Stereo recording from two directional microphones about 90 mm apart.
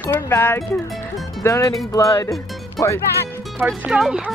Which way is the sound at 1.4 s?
35° left (ahead or behind).